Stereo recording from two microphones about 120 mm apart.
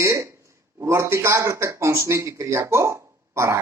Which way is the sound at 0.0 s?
20° right (ahead or behind).